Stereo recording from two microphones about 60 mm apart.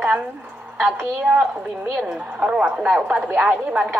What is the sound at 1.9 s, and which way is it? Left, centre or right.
A woman's voice, centre.